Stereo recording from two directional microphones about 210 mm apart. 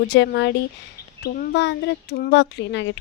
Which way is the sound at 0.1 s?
60° left (ahead or behind).